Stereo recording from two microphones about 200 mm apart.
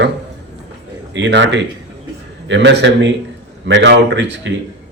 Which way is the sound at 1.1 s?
60° right (ahead or behind).